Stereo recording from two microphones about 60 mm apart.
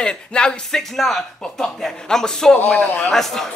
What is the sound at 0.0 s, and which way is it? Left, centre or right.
A man's voice, centre.